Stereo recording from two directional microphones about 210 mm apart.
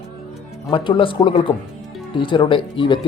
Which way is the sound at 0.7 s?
25° left (ahead or behind).